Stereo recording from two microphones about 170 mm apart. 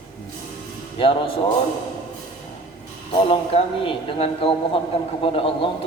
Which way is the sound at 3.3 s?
35° left (ahead or behind).